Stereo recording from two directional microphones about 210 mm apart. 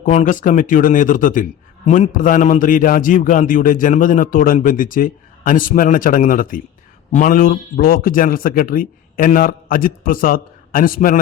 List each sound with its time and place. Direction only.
0.0 s a man's voice: 35° left (ahead or behind)